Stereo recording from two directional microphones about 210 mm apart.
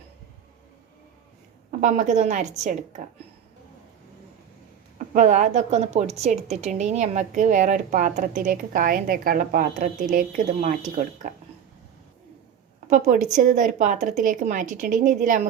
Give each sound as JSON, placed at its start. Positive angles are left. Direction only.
{"t": 1.8, "sound": "a woman's voice", "side_deg": -35}
{"t": 4.9, "sound": "a woman's voice", "side_deg": -35}
{"t": 12.9, "sound": "a woman's voice", "side_deg": -35}